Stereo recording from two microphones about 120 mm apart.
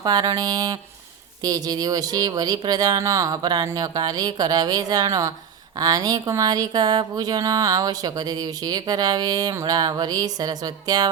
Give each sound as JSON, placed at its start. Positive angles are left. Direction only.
{"t": 0.0, "sound": "speech", "side_deg": -35}